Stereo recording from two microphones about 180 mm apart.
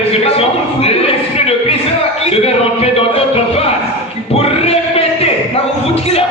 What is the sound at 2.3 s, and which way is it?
Music, 35° left (ahead or behind).